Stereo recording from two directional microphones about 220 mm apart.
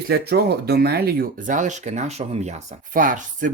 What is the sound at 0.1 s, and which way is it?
Speech, 45° right (ahead or behind).